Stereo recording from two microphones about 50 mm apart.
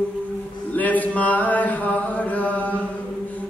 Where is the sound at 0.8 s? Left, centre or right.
Left.